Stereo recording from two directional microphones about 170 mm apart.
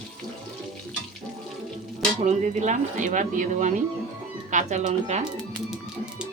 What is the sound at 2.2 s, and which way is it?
Speech, 45° right (ahead or behind).